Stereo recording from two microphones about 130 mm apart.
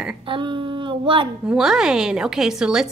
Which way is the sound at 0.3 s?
40° right (ahead or behind).